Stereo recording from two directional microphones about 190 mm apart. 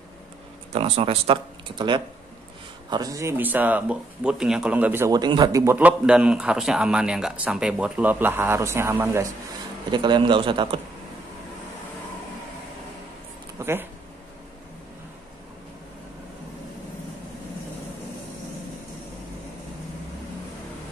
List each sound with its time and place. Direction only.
0.7 s speech: 30° right (ahead or behind); by 9.3 s 15° right (ahead or behind)
9.8 s speech: 25° right (ahead or behind)
13.6 s a sound: 10° right (ahead or behind)